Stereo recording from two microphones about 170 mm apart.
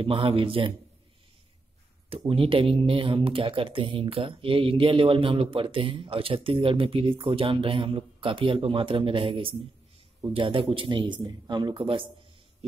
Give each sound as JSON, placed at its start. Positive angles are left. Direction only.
{"t": 0.0, "sound": "speech", "side_deg": -35}
{"t": 2.0, "sound": "a man's voice", "side_deg": -35}